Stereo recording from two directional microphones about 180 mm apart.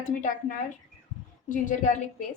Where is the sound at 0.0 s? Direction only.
45° left (ahead or behind).